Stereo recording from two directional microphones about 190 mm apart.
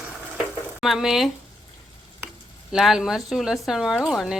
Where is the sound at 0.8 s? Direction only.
Centre (ahead or behind).